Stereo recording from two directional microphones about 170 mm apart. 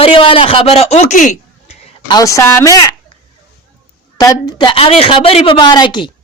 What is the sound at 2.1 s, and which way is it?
Speech, 20° left (ahead or behind).